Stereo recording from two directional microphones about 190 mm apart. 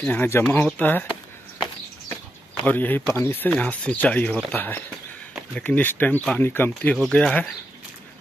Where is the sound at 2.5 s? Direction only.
10° left (ahead or behind).